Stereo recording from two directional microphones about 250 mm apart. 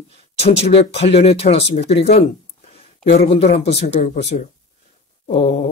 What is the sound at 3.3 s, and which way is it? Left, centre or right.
Speech, left.